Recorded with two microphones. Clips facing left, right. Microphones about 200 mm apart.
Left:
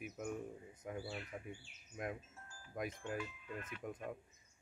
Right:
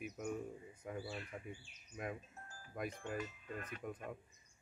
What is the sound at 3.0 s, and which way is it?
Speech, 45° right (ahead or behind).